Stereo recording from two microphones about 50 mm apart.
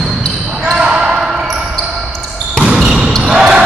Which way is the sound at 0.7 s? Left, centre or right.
Centre.